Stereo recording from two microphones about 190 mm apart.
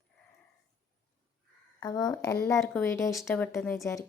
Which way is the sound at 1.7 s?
20° left (ahead or behind).